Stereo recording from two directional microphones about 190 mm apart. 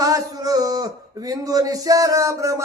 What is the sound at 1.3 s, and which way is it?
Speech, 20° right (ahead or behind).